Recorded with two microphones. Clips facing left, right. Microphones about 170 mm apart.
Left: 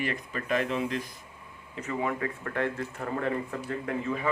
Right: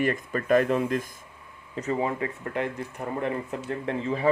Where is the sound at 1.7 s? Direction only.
35° right (ahead or behind).